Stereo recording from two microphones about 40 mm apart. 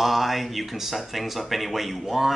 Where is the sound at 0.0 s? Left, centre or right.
Centre.